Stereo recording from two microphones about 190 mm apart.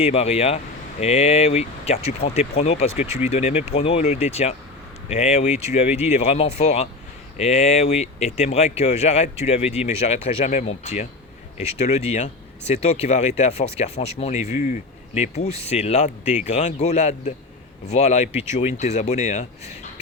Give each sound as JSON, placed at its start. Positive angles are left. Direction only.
{"t": 0.0, "sound": "speech", "side_deg": 30}